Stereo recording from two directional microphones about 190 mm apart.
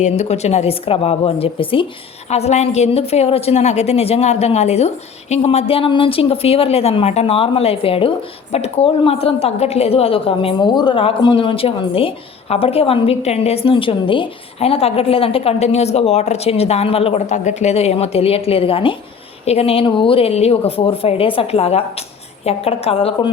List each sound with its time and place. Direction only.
0.0 s a woman's voice: 35° left (ahead or behind)